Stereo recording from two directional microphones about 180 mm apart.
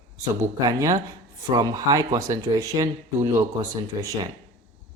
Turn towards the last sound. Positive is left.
turn(degrees=-20)  # may be behind; listen again after turning